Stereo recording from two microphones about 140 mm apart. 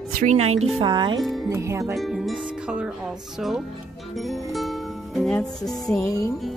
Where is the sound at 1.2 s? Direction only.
Centre (ahead or behind).